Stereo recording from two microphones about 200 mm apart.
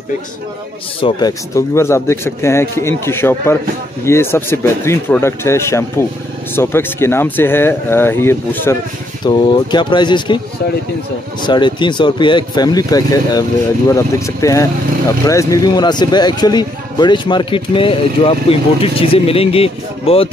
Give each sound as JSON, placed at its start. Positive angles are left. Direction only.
{"t": 1.0, "sound": "speech", "side_deg": 15}
{"t": 11.4, "sound": "speech", "side_deg": 25}